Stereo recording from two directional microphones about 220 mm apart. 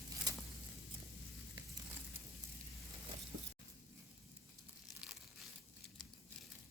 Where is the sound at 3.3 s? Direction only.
50° right (ahead or behind).